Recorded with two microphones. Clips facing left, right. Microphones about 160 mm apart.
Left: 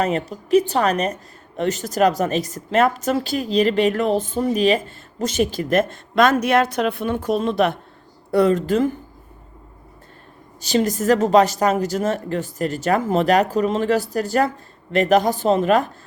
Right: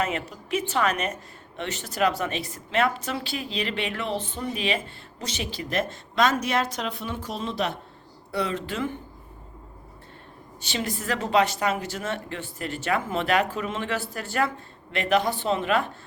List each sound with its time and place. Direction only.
0.0 s a woman's voice: 35° left (ahead or behind)
10.6 s a woman's voice: 40° left (ahead or behind)